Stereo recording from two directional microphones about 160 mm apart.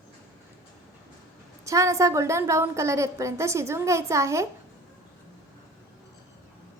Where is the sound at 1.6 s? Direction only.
20° right (ahead or behind).